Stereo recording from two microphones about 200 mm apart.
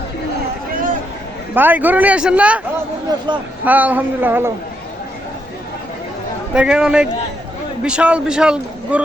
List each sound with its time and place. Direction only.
1.5 s speech: 10° right (ahead or behind)
3.1 s speech: 20° right (ahead or behind)
3.6 s speech: 10° right (ahead or behind)
6.5 s a man's voice: 5° right (ahead or behind)